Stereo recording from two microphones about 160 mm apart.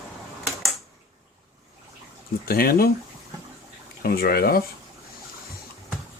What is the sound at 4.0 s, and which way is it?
Speech, 65° left (ahead or behind).